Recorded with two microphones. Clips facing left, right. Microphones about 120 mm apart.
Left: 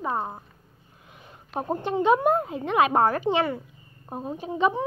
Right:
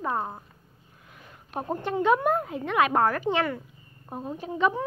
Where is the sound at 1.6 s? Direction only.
20° left (ahead or behind).